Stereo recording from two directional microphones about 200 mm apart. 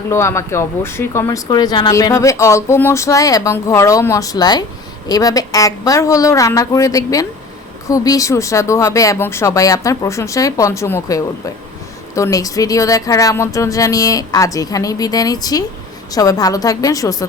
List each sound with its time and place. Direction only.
0.1 s speech: 15° left (ahead or behind)